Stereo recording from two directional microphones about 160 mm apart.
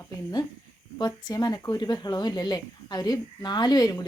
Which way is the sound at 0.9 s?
25° left (ahead or behind).